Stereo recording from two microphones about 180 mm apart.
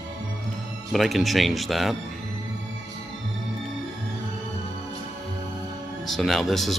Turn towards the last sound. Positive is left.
turn(degrees=0)  # may be behind; listen again after turning